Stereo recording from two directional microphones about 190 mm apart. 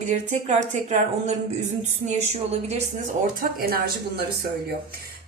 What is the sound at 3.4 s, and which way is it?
Speech, 50° right (ahead or behind).